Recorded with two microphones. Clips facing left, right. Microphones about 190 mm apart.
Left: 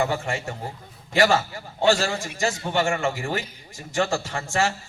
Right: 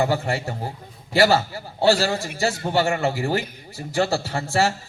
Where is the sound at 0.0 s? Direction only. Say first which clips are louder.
Right 3 dB; 35° right (ahead or behind).